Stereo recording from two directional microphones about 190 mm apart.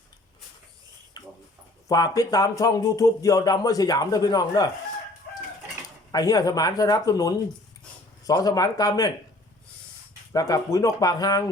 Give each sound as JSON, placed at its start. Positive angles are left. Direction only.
{"t": 1.2, "sound": "a sound", "side_deg": 20}
{"t": 1.9, "sound": "speech", "side_deg": 20}
{"t": 6.1, "sound": "speech", "side_deg": 20}
{"t": 10.3, "sound": "speech", "side_deg": 20}